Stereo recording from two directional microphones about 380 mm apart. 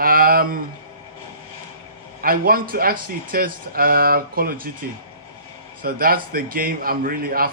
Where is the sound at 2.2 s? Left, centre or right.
Right.